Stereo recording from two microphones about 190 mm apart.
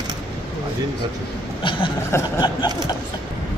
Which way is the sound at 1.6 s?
25° left (ahead or behind).